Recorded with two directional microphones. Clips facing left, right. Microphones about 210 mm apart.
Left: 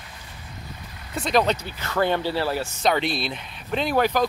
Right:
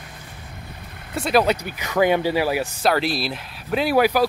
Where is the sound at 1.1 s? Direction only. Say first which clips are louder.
Right 3 dB; 5° right (ahead or behind).